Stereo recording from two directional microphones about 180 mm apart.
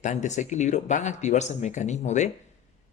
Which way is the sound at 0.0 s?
40° left (ahead or behind).